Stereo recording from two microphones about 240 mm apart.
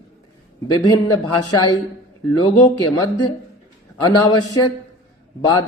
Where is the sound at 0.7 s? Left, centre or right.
Centre.